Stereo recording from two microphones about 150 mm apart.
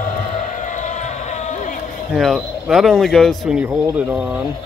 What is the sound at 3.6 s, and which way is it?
Speech, 10° right (ahead or behind).